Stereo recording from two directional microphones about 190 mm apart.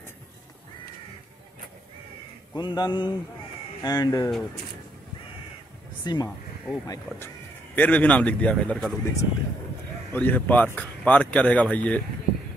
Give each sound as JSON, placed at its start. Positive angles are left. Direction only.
{"t": 2.5, "sound": "mantra", "side_deg": 20}
{"t": 6.0, "sound": "mantra", "side_deg": 20}
{"t": 7.7, "sound": "speech", "side_deg": 10}